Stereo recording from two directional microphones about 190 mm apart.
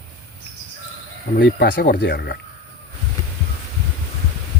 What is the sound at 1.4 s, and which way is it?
Speech, 65° left (ahead or behind).